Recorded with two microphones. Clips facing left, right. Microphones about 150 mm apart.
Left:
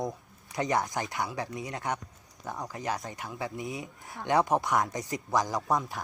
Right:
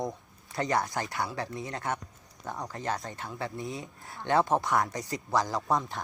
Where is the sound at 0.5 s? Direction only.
15° left (ahead or behind).